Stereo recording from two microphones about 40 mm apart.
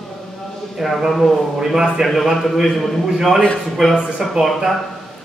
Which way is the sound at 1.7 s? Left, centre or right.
Centre.